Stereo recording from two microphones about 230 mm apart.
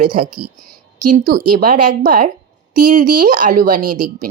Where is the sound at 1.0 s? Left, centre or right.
Right.